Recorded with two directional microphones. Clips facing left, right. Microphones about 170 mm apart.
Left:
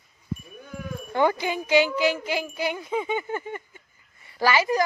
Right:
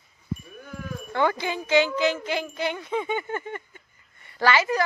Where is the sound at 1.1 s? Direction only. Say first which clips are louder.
Left 2 dB; 15° left (ahead or behind).